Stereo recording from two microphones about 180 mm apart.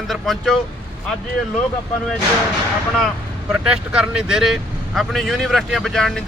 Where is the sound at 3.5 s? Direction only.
5° right (ahead or behind).